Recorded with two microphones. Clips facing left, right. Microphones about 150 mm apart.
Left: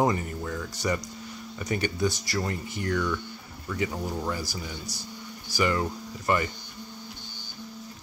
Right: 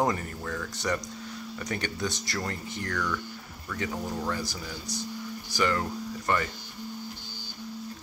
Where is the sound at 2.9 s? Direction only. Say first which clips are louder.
Left 5 dB; 20° left (ahead or behind).